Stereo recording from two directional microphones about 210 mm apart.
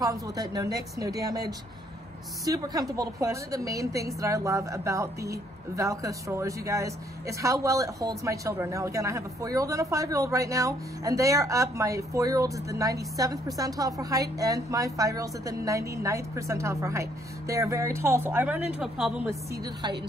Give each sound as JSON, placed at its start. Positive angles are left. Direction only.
{"t": 0.0, "sound": "a woman's voice", "side_deg": -15}
{"t": 19.6, "sound": "a woman's voice", "side_deg": -20}